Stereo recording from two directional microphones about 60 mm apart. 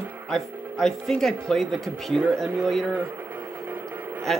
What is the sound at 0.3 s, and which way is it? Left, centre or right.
Speech, centre.